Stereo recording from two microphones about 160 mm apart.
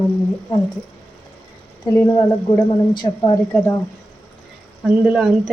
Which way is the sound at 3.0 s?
25° left (ahead or behind).